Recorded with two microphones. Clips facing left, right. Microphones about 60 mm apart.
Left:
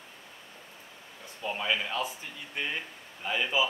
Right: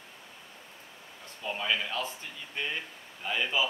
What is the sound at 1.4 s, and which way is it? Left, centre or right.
Speech, centre.